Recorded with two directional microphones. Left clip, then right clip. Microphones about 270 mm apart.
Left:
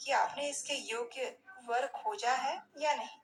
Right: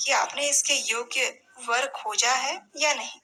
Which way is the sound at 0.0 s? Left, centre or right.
Right.